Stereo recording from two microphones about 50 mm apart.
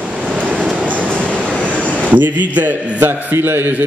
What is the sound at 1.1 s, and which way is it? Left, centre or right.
Train, centre.